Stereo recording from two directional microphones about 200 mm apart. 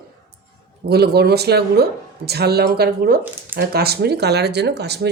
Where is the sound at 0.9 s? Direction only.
55° right (ahead or behind).